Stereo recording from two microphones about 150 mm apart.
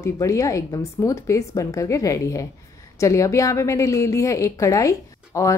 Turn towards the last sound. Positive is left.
turn(degrees=20)  # may be behind; listen again after turning